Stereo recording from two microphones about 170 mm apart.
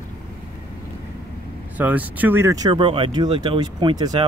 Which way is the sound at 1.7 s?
10° right (ahead or behind).